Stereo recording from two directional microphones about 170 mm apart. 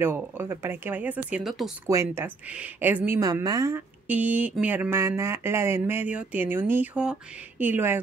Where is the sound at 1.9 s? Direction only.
15° right (ahead or behind).